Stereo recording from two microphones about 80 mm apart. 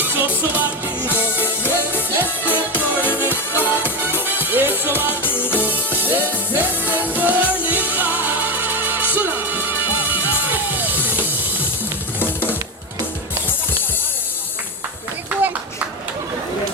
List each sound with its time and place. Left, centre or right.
0.0 s music: right
3.5 s music: left
4.1 s music: right
15.3 s a sound: right